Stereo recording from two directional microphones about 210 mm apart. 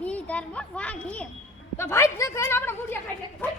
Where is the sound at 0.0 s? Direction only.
5° left (ahead or behind).